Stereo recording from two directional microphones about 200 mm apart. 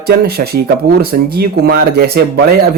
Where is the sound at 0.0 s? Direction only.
50° right (ahead or behind).